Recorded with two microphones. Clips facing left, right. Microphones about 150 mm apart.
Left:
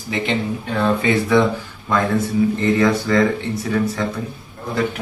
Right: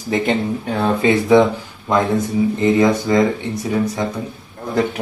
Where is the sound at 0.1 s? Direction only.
45° right (ahead or behind).